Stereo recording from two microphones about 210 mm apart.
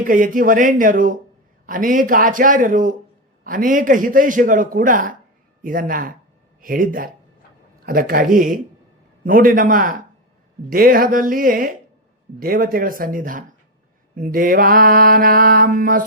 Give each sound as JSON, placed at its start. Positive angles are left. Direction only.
{"t": 0.0, "sound": "a man's voice", "side_deg": -40}
{"t": 7.9, "sound": "mantra", "side_deg": -45}
{"t": 9.2, "sound": "a man's voice", "side_deg": -40}
{"t": 10.7, "sound": "mantra", "side_deg": -45}